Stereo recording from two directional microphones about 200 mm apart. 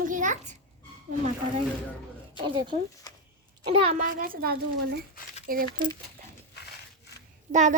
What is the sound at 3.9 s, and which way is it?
A woman's voice, 45° right (ahead or behind).